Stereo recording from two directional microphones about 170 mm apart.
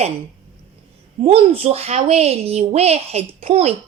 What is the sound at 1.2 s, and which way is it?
A woman's voice, 35° right (ahead or behind).